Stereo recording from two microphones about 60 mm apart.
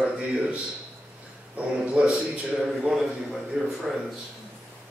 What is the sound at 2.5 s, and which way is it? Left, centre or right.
A man's voice, centre.